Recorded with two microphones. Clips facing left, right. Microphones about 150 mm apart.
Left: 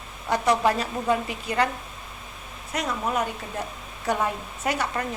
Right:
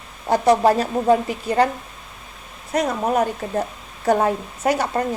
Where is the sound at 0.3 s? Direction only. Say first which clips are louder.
Right 6 dB; 35° right (ahead or behind).